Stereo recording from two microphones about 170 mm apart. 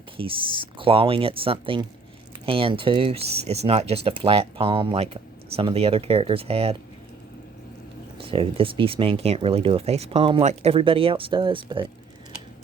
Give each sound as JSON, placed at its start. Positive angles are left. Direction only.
{"t": 0.2, "sound": "speech", "side_deg": -30}
{"t": 8.2, "sound": "speech", "side_deg": -30}